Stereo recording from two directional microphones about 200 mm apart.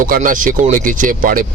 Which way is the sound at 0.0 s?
45° right (ahead or behind).